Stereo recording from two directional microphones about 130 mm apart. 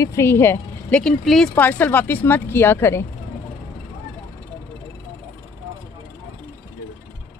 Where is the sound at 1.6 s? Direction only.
15° left (ahead or behind).